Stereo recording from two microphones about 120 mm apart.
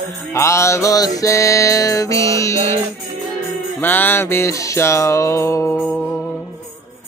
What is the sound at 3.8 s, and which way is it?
Music, 15° left (ahead or behind).